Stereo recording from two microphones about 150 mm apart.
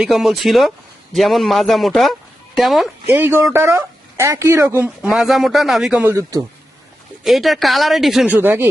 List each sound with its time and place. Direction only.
0.0 s speech: centre (ahead or behind)
3.1 s speech: 15° right (ahead or behind)
6.1 s a man's voice: 20° right (ahead or behind)
7.3 s speech: centre (ahead or behind)